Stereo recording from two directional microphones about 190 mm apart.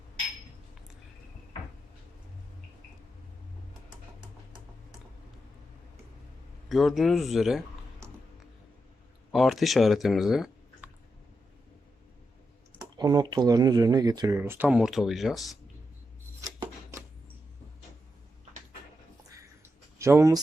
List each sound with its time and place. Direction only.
6.7 s speech: centre (ahead or behind)
9.3 s speech: centre (ahead or behind)
13.0 s speech: 20° right (ahead or behind); by 15.5 s centre (ahead or behind)
20.0 s speech: 15° right (ahead or behind)